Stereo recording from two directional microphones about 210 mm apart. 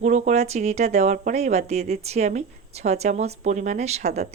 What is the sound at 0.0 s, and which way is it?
Speech, 35° right (ahead or behind).